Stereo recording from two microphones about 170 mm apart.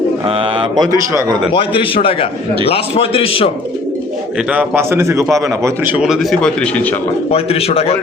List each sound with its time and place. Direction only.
0.3 s speech: 30° right (ahead or behind)
1.5 s a man's voice: 30° left (ahead or behind)
4.5 s a man's voice: 15° right (ahead or behind)
6.0 s speech: centre (ahead or behind)
7.3 s a man's voice: 35° left (ahead or behind)